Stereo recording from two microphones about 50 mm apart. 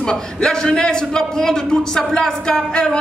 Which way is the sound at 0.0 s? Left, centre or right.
Centre.